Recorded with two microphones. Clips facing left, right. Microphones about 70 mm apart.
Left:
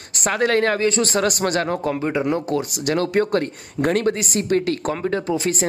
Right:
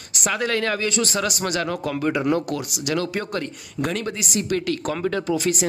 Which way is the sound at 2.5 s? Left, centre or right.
Left.